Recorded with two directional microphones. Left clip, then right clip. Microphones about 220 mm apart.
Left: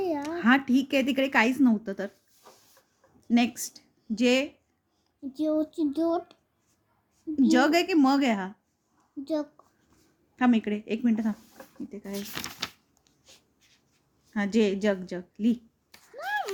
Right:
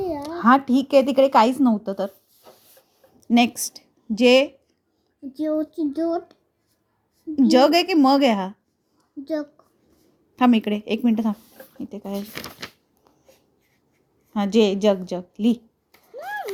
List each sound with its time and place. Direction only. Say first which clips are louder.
0.2 s a woman's voice: right 10 dB; 15° right (ahead or behind)
3.2 s a woman's voice: right 7 dB; 25° right (ahead or behind)
5.3 s speech: right 3 dB; centre (ahead or behind)
7.3 s a woman's voice: right 7 dB; 20° right (ahead or behind)
10.3 s a woman's voice: right 6 dB; 25° right (ahead or behind)
12.2 s speech: right 1 dB; 15° left (ahead or behind)
14.3 s a woman's voice: right 7 dB; 20° right (ahead or behind)
16.1 s a sound: even; 20° left (ahead or behind)